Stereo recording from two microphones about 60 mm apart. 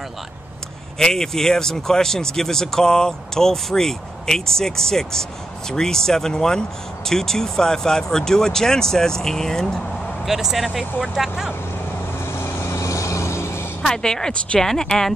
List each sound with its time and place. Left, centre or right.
0.9 s speech: centre
10.2 s speech: centre
12.4 s vehicle: left
12.8 s vehicle: left
13.8 s speech: centre